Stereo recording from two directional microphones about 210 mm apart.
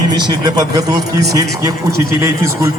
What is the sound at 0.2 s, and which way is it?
A man's voice, 20° right (ahead or behind).